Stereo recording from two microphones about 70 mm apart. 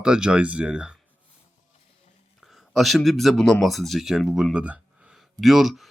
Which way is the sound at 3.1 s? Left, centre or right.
Centre.